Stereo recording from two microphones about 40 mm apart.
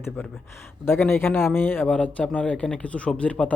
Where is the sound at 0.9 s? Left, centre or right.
Left.